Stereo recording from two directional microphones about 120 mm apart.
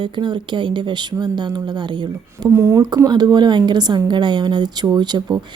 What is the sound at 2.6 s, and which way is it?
Speech, 25° right (ahead or behind).